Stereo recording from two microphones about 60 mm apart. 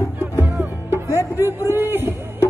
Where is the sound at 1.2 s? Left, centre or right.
Right.